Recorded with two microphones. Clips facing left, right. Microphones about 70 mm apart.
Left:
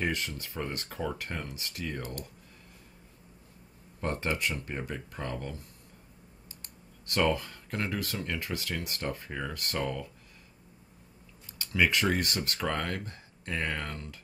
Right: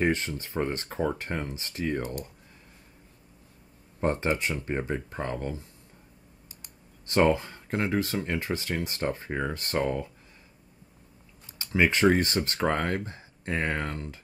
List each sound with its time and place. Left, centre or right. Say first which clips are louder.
0.0 s speech: right 6 dB; right
4.0 s speech: right 5 dB; right
6.6 s speech: even; right
11.6 s speech: right 5 dB; right